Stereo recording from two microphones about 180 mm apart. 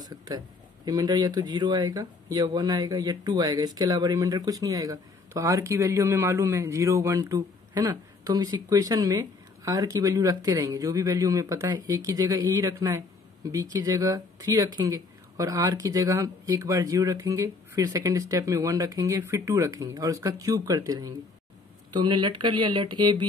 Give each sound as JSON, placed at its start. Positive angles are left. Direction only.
{"t": 0.0, "sound": "speech", "side_deg": -20}